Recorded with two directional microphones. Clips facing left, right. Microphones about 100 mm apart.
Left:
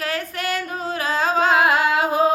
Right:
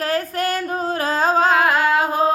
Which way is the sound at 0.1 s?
40° right (ahead or behind).